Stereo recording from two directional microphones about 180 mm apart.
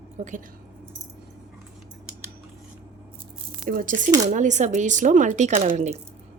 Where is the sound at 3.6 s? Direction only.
55° right (ahead or behind).